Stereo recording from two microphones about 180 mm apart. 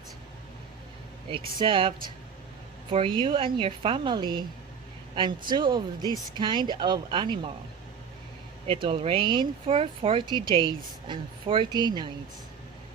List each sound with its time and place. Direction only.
1.3 s speech: 30° right (ahead or behind)
2.9 s speech: 30° right (ahead or behind)
8.6 s speech: 30° right (ahead or behind)